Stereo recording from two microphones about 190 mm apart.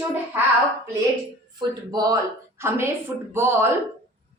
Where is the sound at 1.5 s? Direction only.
20° right (ahead or behind).